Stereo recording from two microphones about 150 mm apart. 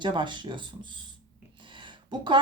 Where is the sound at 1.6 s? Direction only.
30° right (ahead or behind).